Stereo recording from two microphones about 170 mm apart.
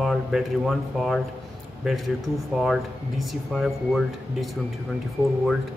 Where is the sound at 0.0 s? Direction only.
Centre (ahead or behind).